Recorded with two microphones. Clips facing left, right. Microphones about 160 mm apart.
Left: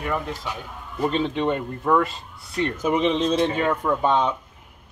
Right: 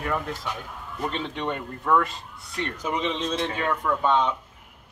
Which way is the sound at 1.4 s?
30° left (ahead or behind).